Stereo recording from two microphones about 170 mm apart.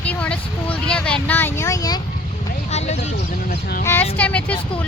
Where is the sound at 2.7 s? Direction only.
40° left (ahead or behind).